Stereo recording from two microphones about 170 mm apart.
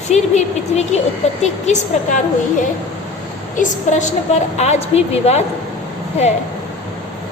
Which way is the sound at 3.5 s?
45° left (ahead or behind).